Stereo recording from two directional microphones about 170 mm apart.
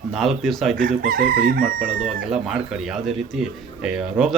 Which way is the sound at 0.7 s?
55° right (ahead or behind).